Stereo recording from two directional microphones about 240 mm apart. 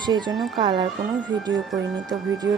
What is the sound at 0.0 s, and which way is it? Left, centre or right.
Speech, centre.